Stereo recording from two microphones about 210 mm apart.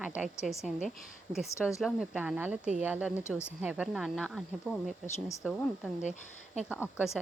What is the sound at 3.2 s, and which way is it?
Speech, 10° left (ahead or behind).